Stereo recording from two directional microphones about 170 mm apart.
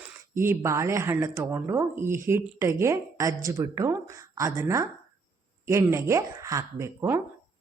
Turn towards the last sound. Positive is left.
turn(degrees=-15)  # may be behind; listen again after turning